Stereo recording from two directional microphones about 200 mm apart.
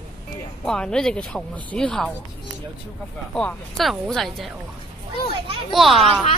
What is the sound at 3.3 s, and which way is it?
Speech, centre (ahead or behind).